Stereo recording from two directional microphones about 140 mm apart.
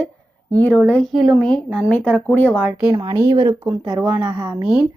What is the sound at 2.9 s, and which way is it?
Speech, 30° right (ahead or behind).